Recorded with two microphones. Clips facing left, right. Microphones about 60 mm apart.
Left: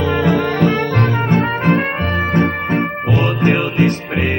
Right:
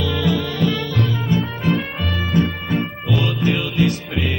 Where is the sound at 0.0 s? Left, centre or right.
Left.